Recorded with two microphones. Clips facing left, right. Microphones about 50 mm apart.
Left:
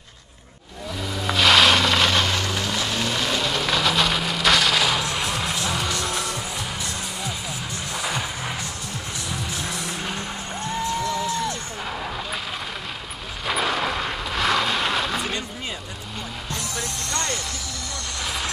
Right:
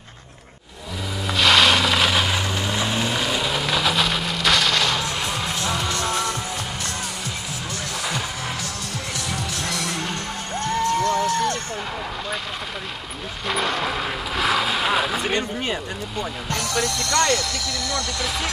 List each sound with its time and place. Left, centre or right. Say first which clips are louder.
1.2 s a sound: even; centre
5.7 s music: right 1 dB; centre
9.3 s music: right 1 dB; right
9.9 s music: right 2 dB; centre
10.6 s music: right 5 dB; right
13.5 s vehicle: even; centre
15.3 s a sound: right 6 dB; right
16.4 s music: right 7 dB; right